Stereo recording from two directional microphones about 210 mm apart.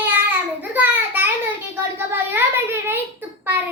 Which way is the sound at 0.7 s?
10° right (ahead or behind).